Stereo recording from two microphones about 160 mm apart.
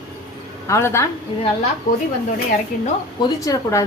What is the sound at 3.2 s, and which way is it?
Speech, 20° left (ahead or behind).